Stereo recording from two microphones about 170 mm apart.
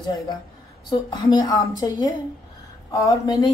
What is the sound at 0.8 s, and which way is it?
A woman's voice, 25° left (ahead or behind).